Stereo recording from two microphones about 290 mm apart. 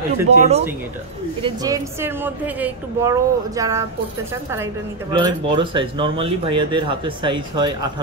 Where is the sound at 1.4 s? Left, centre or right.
Centre.